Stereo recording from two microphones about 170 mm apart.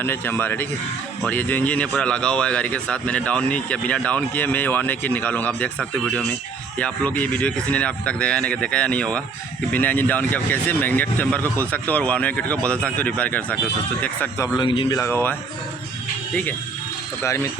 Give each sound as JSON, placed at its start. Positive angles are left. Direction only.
{"t": 0.0, "sound": "speech", "side_deg": 15}